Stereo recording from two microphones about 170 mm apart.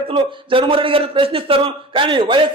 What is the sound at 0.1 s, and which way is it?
A man's voice, 30° right (ahead or behind).